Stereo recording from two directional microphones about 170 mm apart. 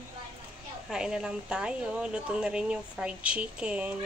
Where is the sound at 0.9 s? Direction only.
5° right (ahead or behind).